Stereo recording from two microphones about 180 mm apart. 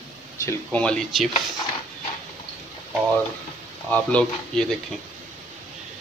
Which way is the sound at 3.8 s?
5° left (ahead or behind).